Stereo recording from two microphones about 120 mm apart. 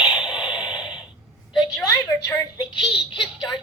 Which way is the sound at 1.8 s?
25° left (ahead or behind).